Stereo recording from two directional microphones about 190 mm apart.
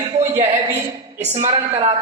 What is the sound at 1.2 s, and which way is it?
Speech, 40° right (ahead or behind).